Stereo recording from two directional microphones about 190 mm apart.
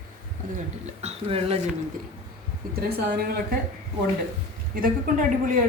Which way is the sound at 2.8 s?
55° right (ahead or behind).